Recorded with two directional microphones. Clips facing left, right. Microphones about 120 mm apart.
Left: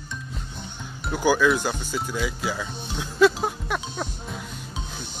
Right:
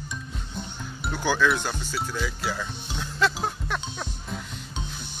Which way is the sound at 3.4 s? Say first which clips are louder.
Left 3 dB; 10° left (ahead or behind).